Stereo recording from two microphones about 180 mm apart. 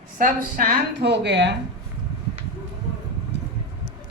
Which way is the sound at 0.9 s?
70° right (ahead or behind).